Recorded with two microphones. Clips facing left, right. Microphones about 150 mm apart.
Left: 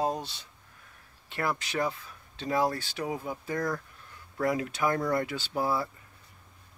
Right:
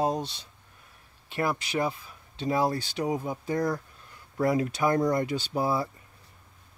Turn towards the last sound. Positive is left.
turn(degrees=-15)  # may be behind; listen again after turning